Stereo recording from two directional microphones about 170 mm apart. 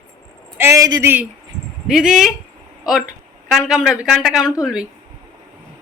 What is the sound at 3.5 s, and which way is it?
Speech, centre (ahead or behind).